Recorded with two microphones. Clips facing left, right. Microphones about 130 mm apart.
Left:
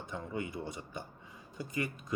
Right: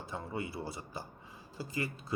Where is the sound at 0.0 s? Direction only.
30° right (ahead or behind).